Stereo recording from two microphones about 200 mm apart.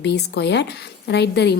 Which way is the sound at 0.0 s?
60° left (ahead or behind).